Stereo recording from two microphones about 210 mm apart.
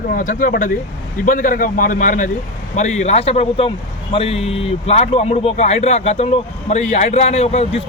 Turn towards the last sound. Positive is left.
turn(degrees=30)  # may be behind; listen again after turning